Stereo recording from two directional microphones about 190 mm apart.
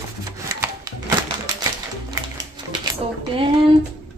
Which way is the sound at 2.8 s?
20° right (ahead or behind).